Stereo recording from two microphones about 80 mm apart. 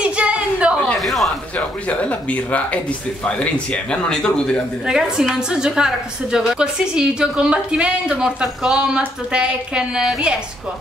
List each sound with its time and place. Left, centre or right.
0.0 s a sound: centre
1.0 s speech: centre
1.6 s speech: centre
4.8 s a woman's voice: centre